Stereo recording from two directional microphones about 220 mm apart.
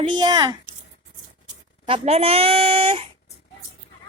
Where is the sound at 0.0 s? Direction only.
20° right (ahead or behind).